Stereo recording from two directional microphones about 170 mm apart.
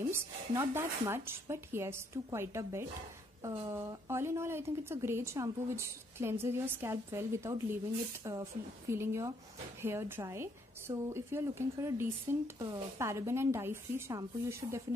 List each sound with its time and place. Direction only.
0.1 s a woman's voice: 15° right (ahead or behind)